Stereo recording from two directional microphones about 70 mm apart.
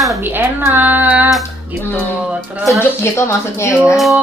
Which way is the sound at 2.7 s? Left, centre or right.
Left.